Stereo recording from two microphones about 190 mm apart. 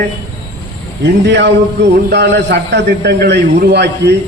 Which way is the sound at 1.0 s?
65° right (ahead or behind).